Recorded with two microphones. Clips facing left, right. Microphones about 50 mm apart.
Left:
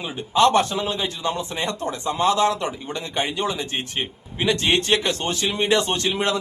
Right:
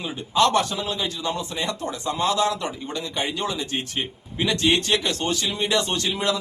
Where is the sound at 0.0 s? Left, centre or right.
Left.